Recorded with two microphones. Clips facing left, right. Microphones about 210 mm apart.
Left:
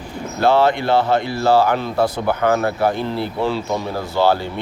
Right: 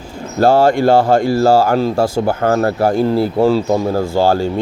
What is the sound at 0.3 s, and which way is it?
Speech, 45° right (ahead or behind).